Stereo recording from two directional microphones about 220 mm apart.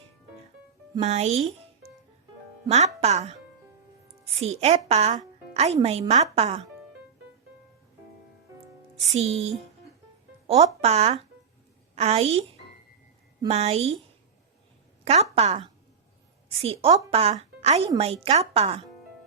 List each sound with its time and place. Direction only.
0.9 s speech: 30° right (ahead or behind)
2.6 s speech: 30° right (ahead or behind)
4.4 s speech: 30° right (ahead or behind)
9.1 s speech: 30° right (ahead or behind)
13.5 s speech: 30° right (ahead or behind)
15.0 s speech: 30° right (ahead or behind)